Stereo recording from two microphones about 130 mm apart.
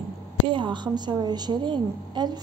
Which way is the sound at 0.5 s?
35° right (ahead or behind).